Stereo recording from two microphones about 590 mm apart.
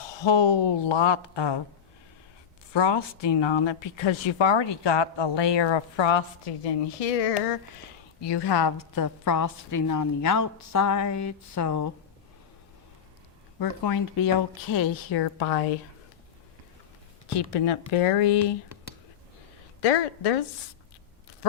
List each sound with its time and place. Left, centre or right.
0.1 s speech: left
2.7 s speech: left
8.2 s a woman's voice: left
13.6 s speech: left
17.5 s speech: left
19.8 s a woman's voice: left